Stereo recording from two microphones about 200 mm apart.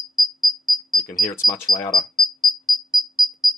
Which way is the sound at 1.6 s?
Centre (ahead or behind).